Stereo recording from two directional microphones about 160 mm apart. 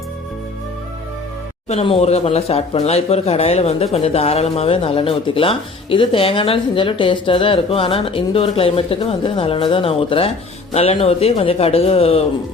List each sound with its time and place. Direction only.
1.6 s speech: 40° left (ahead or behind)